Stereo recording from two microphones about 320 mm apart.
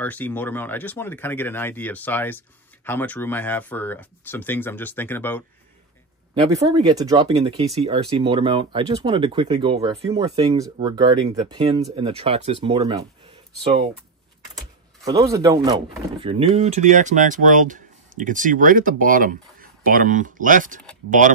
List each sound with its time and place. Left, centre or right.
0.0 s speech: centre
6.5 s speech: centre
15.0 s speech: centre